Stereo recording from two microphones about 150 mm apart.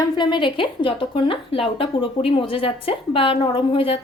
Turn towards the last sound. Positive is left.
turn(degrees=35)  # may be behind; listen again after turning